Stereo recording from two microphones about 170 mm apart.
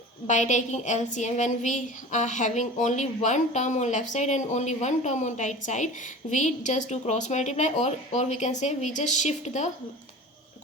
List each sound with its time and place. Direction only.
0.3 s a woman's voice: 45° left (ahead or behind)